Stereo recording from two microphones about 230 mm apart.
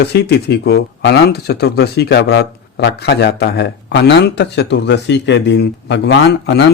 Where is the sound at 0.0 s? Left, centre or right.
Left.